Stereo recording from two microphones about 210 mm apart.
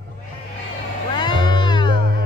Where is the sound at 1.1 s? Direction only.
20° left (ahead or behind).